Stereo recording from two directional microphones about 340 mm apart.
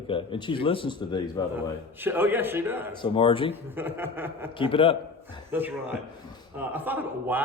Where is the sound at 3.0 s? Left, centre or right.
Centre.